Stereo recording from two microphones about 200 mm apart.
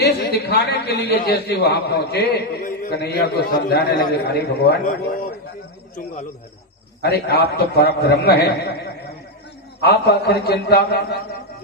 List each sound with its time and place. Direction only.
0.0 s a man's voice: 55° left (ahead or behind)
7.0 s a man's voice: 55° left (ahead or behind)